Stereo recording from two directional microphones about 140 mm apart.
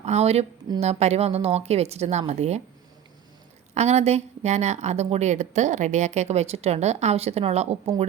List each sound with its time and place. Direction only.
0.0 s a woman's voice: 50° right (ahead or behind)
3.8 s a woman's voice: 50° right (ahead or behind)